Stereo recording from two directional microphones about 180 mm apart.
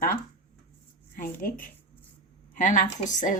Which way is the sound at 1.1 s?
50° left (ahead or behind).